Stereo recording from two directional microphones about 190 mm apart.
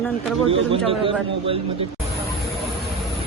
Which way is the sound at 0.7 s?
30° right (ahead or behind).